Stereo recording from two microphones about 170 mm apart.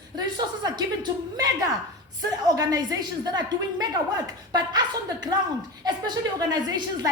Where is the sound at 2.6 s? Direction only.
20° right (ahead or behind).